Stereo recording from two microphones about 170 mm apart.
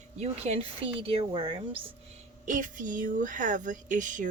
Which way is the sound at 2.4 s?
50° right (ahead or behind).